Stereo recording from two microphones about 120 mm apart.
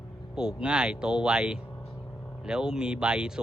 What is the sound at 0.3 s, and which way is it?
Speech, 5° right (ahead or behind).